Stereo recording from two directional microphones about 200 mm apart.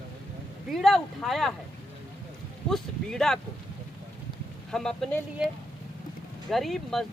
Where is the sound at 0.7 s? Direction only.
Centre (ahead or behind).